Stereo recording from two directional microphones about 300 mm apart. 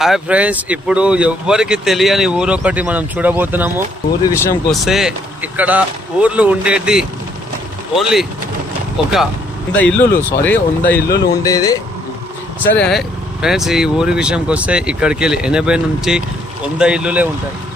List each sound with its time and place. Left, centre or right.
0.0 s speech: centre
4.3 s speech: centre